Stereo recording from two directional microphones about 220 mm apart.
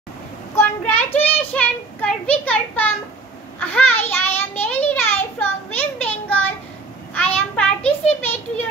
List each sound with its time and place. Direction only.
0.6 s a child's voice: 10° left (ahead or behind)
4.1 s child singing: 10° left (ahead or behind)
7.2 s a sound: 5° left (ahead or behind)